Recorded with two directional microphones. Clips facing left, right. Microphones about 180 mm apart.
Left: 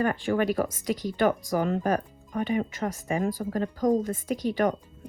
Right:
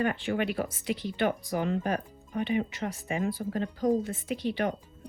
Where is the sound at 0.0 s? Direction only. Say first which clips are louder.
Left 3 dB; 45° left (ahead or behind).